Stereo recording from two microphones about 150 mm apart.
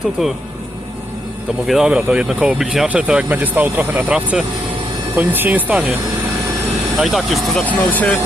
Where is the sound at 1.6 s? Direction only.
Centre (ahead or behind).